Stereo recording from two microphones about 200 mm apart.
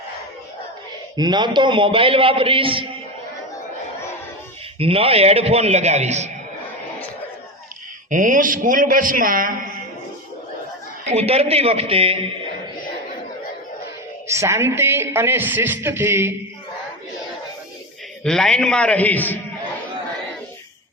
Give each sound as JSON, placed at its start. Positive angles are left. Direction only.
{"t": 1.1, "sound": "a man's voice", "side_deg": -20}
{"t": 4.8, "sound": "a man's voice", "side_deg": -30}
{"t": 8.1, "sound": "a man's voice", "side_deg": -40}
{"t": 11.1, "sound": "a man's voice", "side_deg": -30}
{"t": 14.3, "sound": "speech", "side_deg": -15}
{"t": 18.2, "sound": "a man's voice", "side_deg": 0}